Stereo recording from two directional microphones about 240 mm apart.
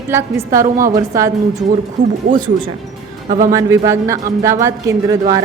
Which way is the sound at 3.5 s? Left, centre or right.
Centre.